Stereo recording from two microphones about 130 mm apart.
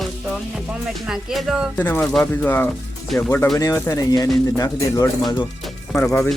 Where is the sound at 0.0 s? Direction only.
5° right (ahead or behind).